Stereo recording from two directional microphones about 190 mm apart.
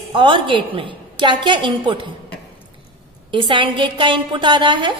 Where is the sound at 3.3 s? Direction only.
25° right (ahead or behind).